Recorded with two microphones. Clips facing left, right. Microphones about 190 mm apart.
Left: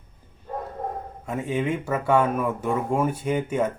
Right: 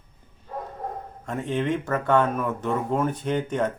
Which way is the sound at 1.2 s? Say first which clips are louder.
Even; 10° left (ahead or behind).